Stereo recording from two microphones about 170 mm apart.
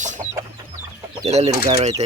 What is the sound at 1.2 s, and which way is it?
Speech, 40° right (ahead or behind).